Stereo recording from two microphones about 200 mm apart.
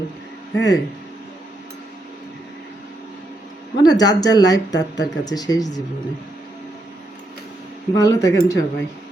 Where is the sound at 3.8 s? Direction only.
20° left (ahead or behind).